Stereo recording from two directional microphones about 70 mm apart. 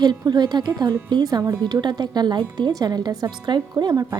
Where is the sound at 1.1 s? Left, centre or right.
Right.